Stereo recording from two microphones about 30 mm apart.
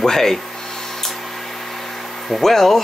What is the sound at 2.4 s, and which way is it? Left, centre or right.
Speech, centre.